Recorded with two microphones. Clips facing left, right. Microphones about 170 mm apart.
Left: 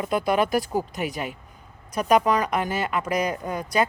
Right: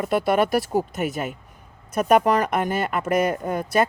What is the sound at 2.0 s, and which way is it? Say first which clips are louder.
Speech: right 2 dB; 50° right (ahead or behind).